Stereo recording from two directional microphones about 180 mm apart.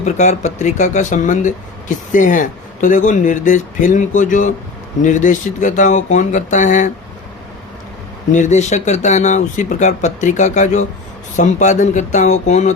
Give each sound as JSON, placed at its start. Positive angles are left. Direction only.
{"t": 0.0, "sound": "speech", "side_deg": 40}
{"t": 8.3, "sound": "speech", "side_deg": 40}